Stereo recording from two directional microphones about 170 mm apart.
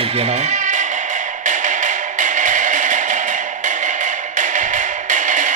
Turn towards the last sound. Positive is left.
turn(degrees=-50)  # may be behind; listen again after turning